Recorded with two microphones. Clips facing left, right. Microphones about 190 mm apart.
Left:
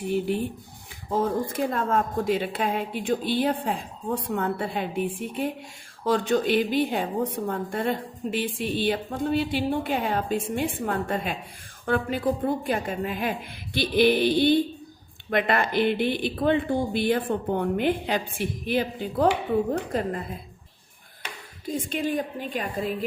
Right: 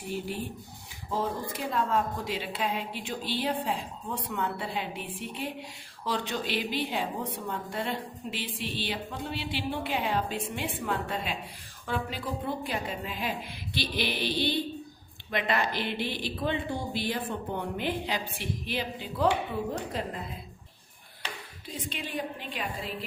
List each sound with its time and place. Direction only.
1.1 s a woman's voice: 50° left (ahead or behind)
21.7 s a woman's voice: 45° left (ahead or behind)